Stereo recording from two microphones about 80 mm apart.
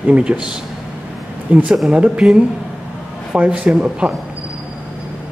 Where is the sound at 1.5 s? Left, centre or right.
Centre.